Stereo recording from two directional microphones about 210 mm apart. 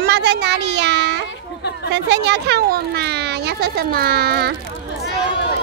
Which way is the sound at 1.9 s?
55° right (ahead or behind).